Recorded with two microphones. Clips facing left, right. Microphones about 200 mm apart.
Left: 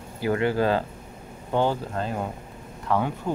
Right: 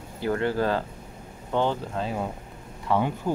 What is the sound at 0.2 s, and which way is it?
Speech, 10° left (ahead or behind).